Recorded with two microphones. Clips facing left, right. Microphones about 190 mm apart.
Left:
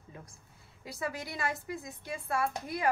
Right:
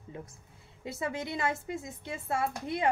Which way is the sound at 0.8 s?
25° right (ahead or behind).